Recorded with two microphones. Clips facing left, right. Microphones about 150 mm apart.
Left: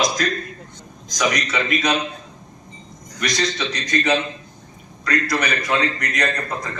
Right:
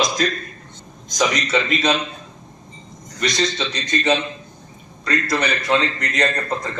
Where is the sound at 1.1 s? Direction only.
25° right (ahead or behind).